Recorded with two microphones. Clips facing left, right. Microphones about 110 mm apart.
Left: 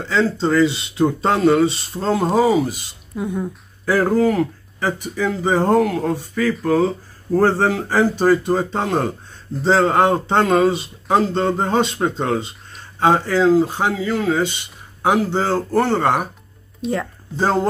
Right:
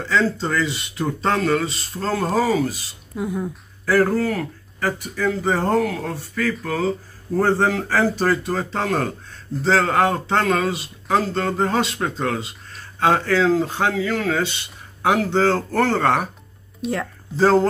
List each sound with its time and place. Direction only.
0.1 s speech: 25° left (ahead or behind)
3.2 s speech: centre (ahead or behind)
3.8 s speech: 15° left (ahead or behind)
16.8 s speech: centre (ahead or behind)
17.4 s speech: 15° left (ahead or behind)